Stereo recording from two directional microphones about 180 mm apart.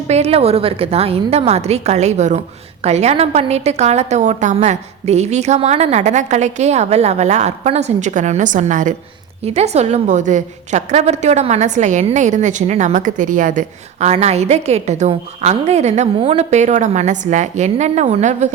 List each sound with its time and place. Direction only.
0.1 s a woman's voice: 35° right (ahead or behind)